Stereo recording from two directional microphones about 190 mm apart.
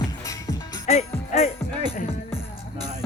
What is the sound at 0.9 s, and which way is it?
Music, 35° left (ahead or behind).